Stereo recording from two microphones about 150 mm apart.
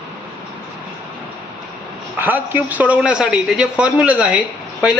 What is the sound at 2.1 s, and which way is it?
A man's voice, 15° right (ahead or behind).